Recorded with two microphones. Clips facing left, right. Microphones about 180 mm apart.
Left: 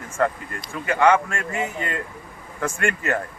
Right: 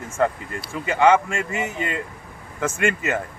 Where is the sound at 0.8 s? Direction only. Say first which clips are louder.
Right 1 dB; 20° right (ahead or behind).